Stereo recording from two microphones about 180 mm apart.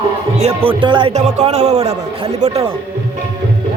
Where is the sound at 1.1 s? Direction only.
40° right (ahead or behind).